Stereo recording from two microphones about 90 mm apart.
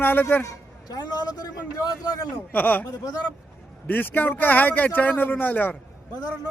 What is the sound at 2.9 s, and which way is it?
Speech, 45° left (ahead or behind).